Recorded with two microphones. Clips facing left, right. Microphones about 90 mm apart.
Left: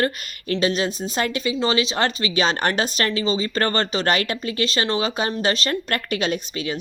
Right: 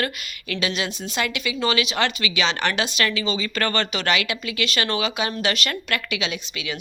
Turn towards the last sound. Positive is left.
turn(degrees=40)  # may be behind; listen again after turning